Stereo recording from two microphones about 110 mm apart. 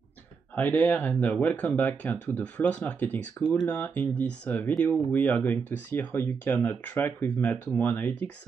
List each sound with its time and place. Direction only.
0.6 s speech: 15° left (ahead or behind)